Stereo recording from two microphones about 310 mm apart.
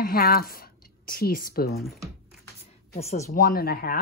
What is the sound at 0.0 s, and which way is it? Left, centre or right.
A woman's voice, left.